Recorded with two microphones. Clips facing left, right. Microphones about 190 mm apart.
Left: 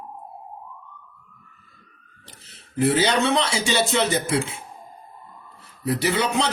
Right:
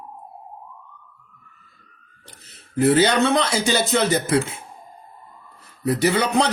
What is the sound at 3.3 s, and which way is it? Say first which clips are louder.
Speech: right 2 dB; 40° right (ahead or behind).